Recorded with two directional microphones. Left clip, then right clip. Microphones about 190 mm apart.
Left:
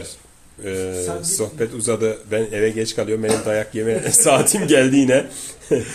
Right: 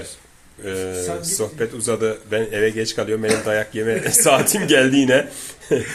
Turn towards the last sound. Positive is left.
turn(degrees=10)  # may be behind; listen again after turning